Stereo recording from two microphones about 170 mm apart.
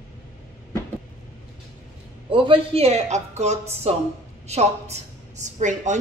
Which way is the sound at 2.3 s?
30° right (ahead or behind).